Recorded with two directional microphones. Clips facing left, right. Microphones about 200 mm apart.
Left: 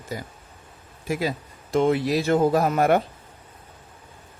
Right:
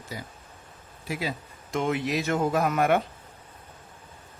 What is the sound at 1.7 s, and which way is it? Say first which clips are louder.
Speech: left 6 dB; 35° left (ahead or behind).